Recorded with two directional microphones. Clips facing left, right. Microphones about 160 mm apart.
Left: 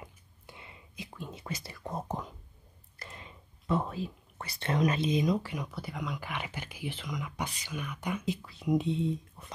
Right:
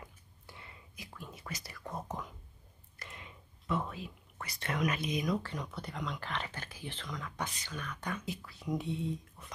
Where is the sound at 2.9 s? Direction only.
35° left (ahead or behind).